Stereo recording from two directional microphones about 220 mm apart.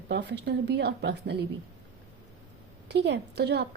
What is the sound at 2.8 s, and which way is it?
Speech, 50° right (ahead or behind).